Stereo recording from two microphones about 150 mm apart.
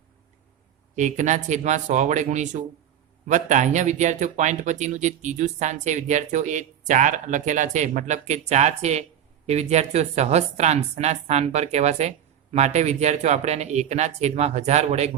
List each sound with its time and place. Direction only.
0.9 s speech: 55° right (ahead or behind)